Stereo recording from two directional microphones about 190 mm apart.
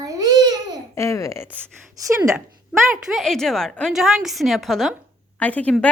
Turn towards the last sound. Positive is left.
turn(degrees=5)  # may be behind; listen again after turning